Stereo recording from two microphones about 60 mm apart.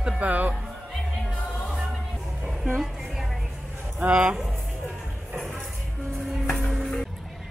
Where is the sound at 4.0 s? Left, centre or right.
Centre.